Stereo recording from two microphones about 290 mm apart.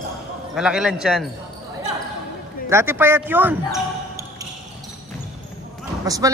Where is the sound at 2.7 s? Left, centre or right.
Centre.